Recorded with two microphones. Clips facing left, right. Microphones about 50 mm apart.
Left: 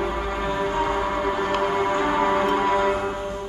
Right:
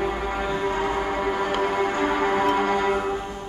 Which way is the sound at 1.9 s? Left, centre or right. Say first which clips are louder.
Left 1 dB; centre.